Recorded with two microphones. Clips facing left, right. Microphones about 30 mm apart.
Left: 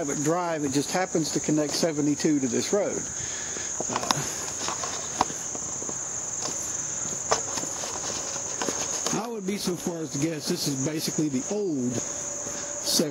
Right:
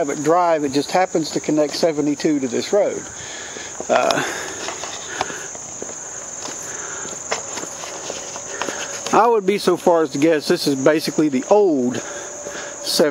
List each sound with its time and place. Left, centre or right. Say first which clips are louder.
0.0 s speech: right 10 dB; right
3.9 s speech: right 15 dB; right
8.1 s speech: right 4 dB; right